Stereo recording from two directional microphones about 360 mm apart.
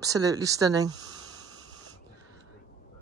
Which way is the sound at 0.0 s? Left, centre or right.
Centre.